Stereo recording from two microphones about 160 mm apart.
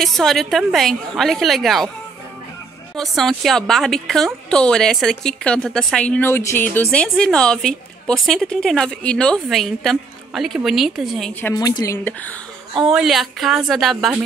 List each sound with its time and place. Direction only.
0.0 s a woman's voice: centre (ahead or behind)
3.0 s a woman's voice: centre (ahead or behind)
11.4 s a woman's voice: 25° left (ahead or behind)
12.8 s a woman's voice: centre (ahead or behind)